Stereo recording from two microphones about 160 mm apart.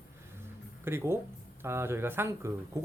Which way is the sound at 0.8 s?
15° right (ahead or behind).